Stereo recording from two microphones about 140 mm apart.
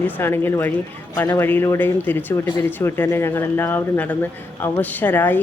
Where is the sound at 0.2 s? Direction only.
15° left (ahead or behind).